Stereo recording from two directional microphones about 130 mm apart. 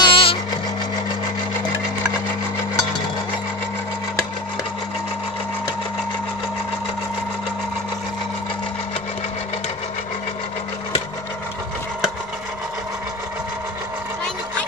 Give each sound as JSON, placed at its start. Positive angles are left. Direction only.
{"t": 0.0, "sound": "music", "side_deg": 45}